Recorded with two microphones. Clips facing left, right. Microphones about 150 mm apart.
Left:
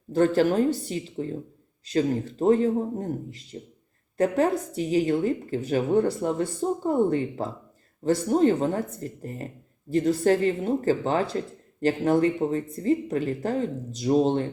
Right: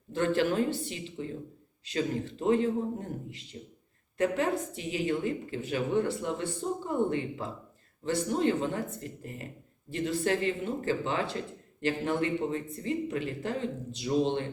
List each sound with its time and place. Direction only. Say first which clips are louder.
0.1 s speech: left 6 dB; 40° left (ahead or behind)